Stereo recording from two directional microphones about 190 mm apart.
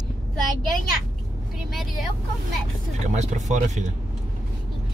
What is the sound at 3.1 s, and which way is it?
Speech, 40° right (ahead or behind).